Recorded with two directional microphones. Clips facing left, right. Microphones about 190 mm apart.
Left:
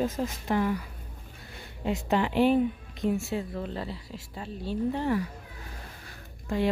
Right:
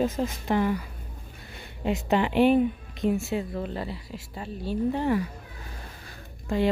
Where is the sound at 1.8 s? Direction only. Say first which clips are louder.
Right 2 dB; 20° right (ahead or behind).